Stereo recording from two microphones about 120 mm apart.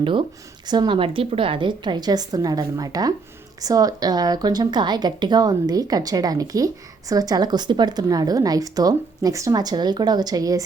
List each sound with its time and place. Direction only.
0.0 s a woman's voice: 45° right (ahead or behind)